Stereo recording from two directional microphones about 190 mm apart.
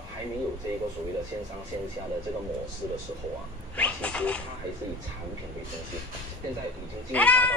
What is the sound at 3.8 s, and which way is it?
Speech, 5° left (ahead or behind).